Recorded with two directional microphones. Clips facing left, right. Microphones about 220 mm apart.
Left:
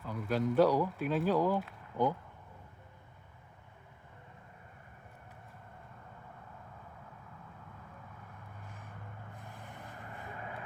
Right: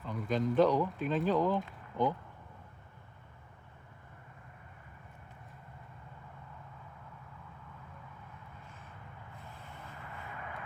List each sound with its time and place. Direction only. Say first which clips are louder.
0.0 s speech: even; 5° left (ahead or behind)
9.5 s vehicle: left 1 dB; 15° left (ahead or behind)
10.3 s vehicle: left 1 dB; 30° left (ahead or behind)